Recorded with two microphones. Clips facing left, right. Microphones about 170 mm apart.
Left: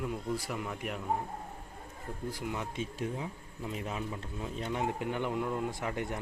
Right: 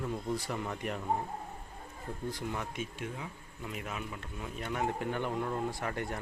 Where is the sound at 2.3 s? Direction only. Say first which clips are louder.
Even; 10° left (ahead or behind).